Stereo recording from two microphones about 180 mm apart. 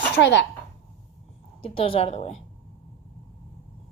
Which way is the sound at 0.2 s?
80° left.